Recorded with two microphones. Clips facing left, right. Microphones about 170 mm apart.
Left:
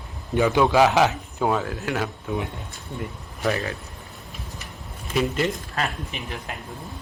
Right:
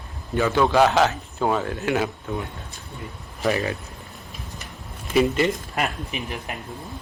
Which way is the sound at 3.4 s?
5° right (ahead or behind).